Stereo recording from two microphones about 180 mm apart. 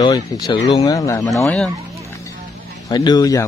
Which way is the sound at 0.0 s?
25° left (ahead or behind).